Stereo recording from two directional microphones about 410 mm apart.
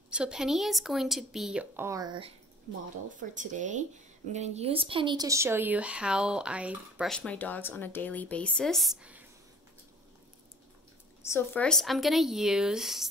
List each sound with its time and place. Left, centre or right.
0.1 s speech: centre
11.2 s speech: centre